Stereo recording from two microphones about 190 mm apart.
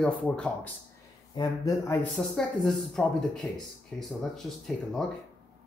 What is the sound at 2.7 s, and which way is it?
Speech, centre (ahead or behind).